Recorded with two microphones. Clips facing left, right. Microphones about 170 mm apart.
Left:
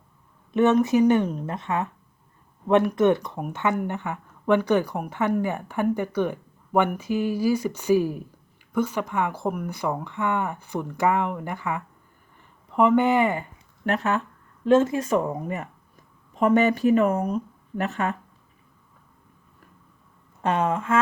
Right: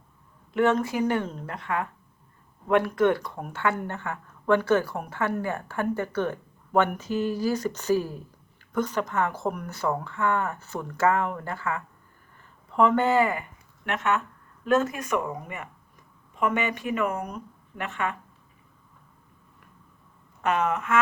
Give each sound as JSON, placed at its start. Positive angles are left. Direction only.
{"t": 0.5, "sound": "a woman's voice", "side_deg": 20}
{"t": 13.8, "sound": "a woman's voice", "side_deg": 35}
{"t": 20.4, "sound": "a woman's voice", "side_deg": 30}